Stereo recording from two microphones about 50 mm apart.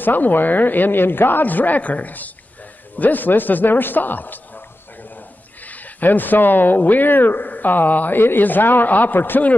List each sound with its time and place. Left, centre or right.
0.0 s speech: left